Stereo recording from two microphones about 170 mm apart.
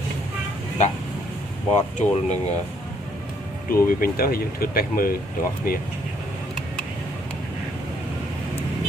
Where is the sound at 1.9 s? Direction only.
40° left (ahead or behind).